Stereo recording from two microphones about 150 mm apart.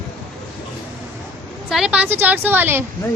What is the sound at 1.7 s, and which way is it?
A woman's voice, 5° right (ahead or behind).